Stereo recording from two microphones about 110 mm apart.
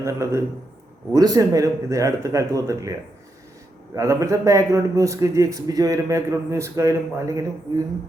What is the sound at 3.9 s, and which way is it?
Speech, 30° right (ahead or behind).